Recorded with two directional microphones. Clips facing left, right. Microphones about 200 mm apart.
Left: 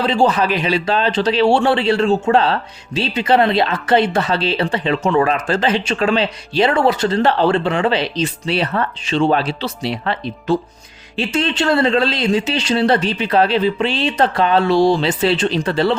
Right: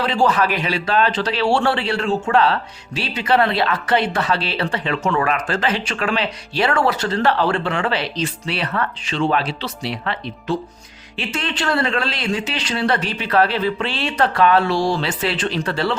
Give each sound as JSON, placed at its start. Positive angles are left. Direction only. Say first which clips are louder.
{"t": 0.0, "sound": "speech", "louder": "left 2 dB", "side_deg": 25}